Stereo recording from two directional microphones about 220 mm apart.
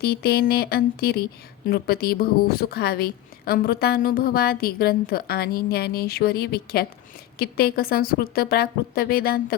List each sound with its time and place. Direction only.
0.0 s speech: 45° left (ahead or behind)